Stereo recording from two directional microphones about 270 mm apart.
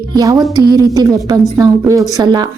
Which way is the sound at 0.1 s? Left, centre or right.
Centre.